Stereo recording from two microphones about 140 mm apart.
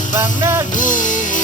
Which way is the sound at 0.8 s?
70° left (ahead or behind).